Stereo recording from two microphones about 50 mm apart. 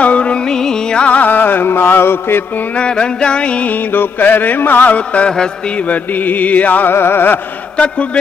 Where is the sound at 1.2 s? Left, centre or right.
Left.